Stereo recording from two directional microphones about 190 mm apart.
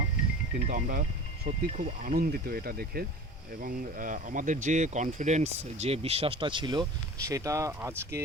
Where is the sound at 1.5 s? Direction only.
40° right (ahead or behind).